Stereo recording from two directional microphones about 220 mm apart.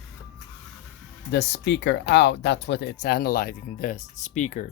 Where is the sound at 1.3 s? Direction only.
50° left (ahead or behind).